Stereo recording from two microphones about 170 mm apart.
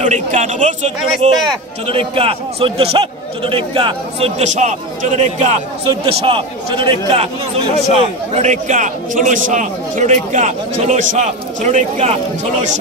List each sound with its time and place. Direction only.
0.0 s a man's voice: 45° right (ahead or behind)
1.9 s a man's voice: 35° right (ahead or behind)